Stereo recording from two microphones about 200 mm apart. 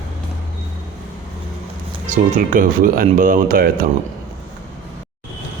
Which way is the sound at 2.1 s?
40° right (ahead or behind).